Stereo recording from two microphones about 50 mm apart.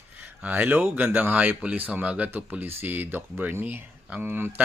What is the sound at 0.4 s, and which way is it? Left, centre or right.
Speech, right.